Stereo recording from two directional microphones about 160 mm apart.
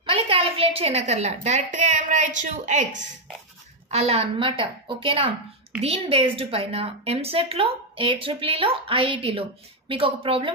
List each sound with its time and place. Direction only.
0.0 s a woman's voice: 35° right (ahead or behind)
3.9 s a woman's voice: 40° right (ahead or behind)